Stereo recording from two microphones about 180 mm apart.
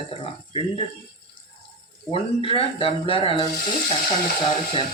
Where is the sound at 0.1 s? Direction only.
30° left (ahead or behind).